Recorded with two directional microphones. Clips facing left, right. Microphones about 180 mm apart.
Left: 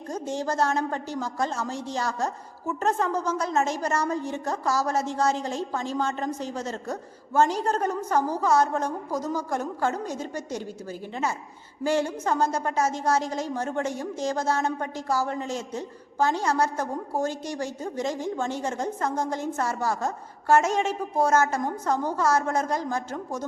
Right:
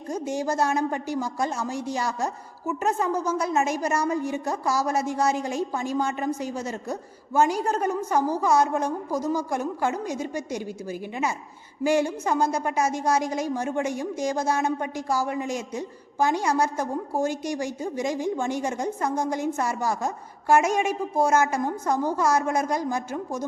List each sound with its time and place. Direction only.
0.1 s a woman's voice: 10° right (ahead or behind)
11.8 s a woman's voice: 10° right (ahead or behind)